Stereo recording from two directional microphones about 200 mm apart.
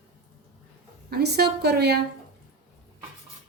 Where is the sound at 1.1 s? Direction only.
55° right (ahead or behind).